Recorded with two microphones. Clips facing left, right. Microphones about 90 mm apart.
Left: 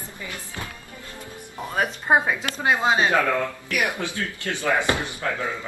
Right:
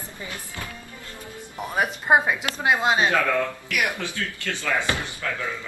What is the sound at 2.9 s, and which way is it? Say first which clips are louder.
Speech: left 2 dB; 20° left (ahead or behind).